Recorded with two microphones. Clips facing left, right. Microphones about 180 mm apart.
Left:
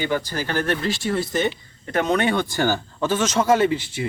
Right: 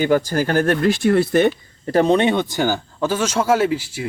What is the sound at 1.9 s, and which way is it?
Speech, 30° right (ahead or behind).